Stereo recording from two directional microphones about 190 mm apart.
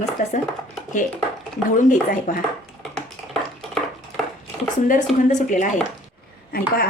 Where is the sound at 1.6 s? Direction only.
45° left (ahead or behind).